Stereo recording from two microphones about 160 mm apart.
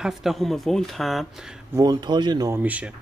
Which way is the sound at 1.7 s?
25° right (ahead or behind).